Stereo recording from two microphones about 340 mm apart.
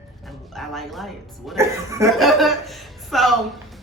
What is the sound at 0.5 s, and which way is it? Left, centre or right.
Speech, centre.